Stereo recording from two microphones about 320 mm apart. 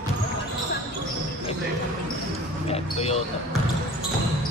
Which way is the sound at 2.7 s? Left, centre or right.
Centre.